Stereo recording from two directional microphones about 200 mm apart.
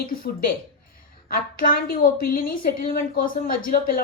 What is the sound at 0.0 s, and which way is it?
A woman's voice, 45° left (ahead or behind).